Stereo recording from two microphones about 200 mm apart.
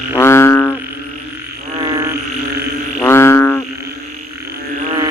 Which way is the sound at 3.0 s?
10° left (ahead or behind).